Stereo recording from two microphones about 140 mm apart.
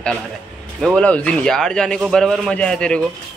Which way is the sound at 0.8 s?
5° left (ahead or behind).